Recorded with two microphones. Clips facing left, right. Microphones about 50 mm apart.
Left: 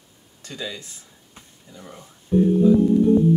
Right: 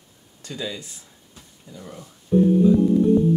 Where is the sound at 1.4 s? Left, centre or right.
Left.